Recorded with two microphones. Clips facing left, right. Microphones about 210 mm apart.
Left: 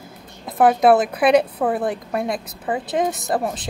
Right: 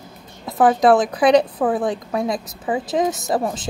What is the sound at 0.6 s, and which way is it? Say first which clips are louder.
A woman's voice: even; 10° left (ahead or behind).